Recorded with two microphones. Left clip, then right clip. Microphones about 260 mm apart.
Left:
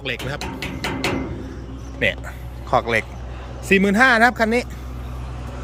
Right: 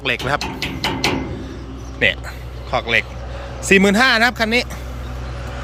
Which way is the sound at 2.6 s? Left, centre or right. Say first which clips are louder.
Right 1 dB; left.